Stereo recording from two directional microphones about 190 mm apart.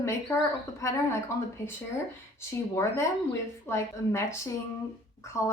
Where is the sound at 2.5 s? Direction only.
15° left (ahead or behind).